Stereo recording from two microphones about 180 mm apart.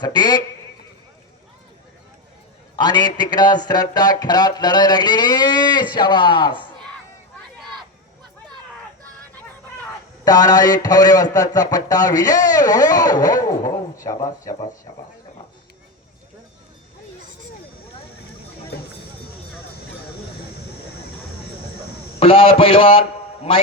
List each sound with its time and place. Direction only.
0.0 s speech: 25° left (ahead or behind)
2.7 s speech: 25° left (ahead or behind)
10.2 s speech: 20° left (ahead or behind)
22.2 s a man's voice: 30° left (ahead or behind)